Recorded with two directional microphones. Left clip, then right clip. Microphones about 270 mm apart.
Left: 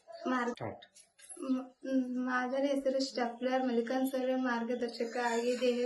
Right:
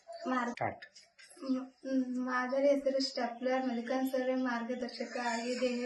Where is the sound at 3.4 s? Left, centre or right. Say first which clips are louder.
Left 3 dB; centre.